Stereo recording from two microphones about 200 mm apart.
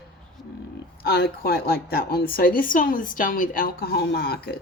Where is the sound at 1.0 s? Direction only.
50° left (ahead or behind).